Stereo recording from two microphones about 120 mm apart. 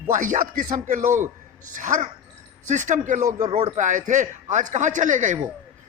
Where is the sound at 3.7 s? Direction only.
90° right.